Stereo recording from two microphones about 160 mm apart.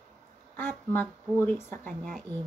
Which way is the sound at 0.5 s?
10° left (ahead or behind).